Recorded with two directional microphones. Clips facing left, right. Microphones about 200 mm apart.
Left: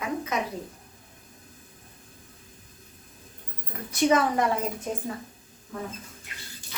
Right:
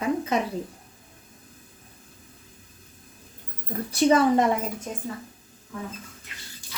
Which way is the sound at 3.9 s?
30° right (ahead or behind).